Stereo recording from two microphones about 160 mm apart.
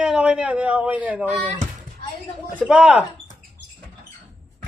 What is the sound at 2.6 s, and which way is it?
Speech, 5° right (ahead or behind).